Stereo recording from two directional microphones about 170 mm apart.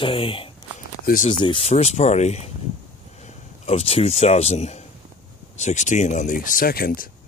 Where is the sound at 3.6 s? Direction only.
35° left (ahead or behind); by 7.1 s 60° left (ahead or behind).